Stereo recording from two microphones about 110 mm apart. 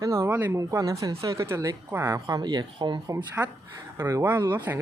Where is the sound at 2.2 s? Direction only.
40° right (ahead or behind).